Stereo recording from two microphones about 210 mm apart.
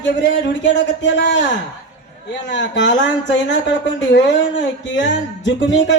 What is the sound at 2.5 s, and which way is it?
Music, 60° left (ahead or behind).